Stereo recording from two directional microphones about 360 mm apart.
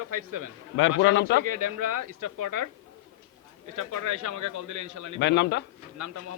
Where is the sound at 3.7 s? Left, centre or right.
Right.